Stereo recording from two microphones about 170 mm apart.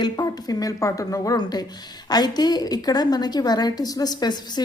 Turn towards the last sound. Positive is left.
turn(degrees=25)  # may be behind; listen again after turning